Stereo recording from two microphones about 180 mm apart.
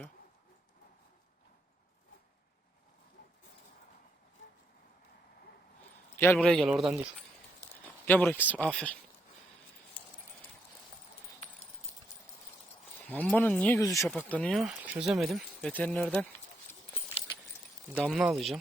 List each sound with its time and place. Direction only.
6.1 s speech: 10° left (ahead or behind); by 7.1 s 5° right (ahead or behind)
8.0 s speech: 10° left (ahead or behind)
11.9 s clip-clop: 35° left (ahead or behind)
13.1 s speech: 10° left (ahead or behind)
18.0 s speech: centre (ahead or behind)